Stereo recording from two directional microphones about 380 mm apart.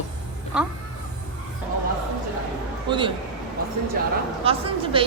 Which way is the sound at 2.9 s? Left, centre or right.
Centre.